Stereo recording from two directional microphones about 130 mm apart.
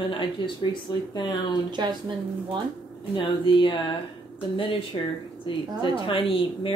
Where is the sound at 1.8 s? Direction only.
35° right (ahead or behind).